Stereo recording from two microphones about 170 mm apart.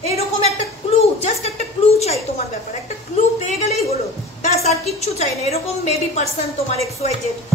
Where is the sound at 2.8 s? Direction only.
40° left (ahead or behind).